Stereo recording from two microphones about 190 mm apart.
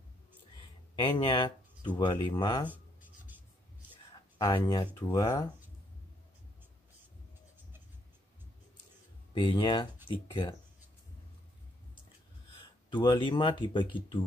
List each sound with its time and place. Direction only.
0.9 s speech: 25° left (ahead or behind)
2.7 s writing: 10° right (ahead or behind)
4.4 s speech: 25° left (ahead or behind)
5.0 s speech: 15° left (ahead or behind)
9.3 s speech: 25° left (ahead or behind)
12.9 s speech: 25° left (ahead or behind)